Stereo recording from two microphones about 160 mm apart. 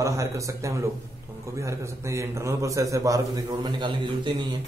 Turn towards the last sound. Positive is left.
turn(degrees=-30)  # may be behind; listen again after turning